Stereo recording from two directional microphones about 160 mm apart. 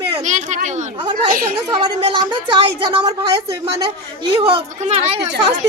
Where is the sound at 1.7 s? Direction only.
30° right (ahead or behind).